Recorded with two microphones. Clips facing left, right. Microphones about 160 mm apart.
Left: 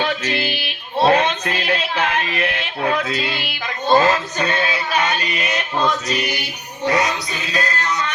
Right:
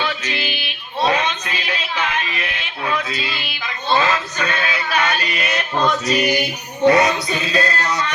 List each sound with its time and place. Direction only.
0.0 s music: 55° left (ahead or behind)
1.0 s a sound: 55° left (ahead or behind); by 5.8 s 20° left (ahead or behind)
5.8 s music: 10° right (ahead or behind)
6.8 s music: 25° right (ahead or behind)